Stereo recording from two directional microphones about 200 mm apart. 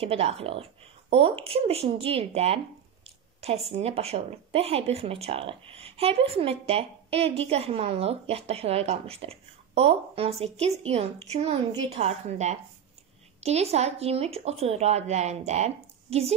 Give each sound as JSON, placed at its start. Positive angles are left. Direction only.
{"t": 0.0, "sound": "speech", "side_deg": -30}
{"t": 3.7, "sound": "speech", "side_deg": -30}